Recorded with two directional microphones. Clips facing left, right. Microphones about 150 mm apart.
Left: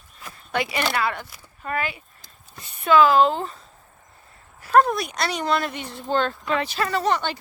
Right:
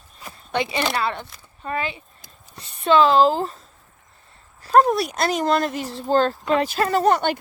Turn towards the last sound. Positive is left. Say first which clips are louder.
# right 5 dB
turn(degrees=-50)  # may be behind; listen again after turning